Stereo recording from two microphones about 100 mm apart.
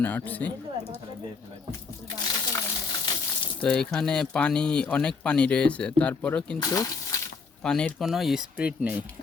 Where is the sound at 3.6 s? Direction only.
10° left (ahead or behind).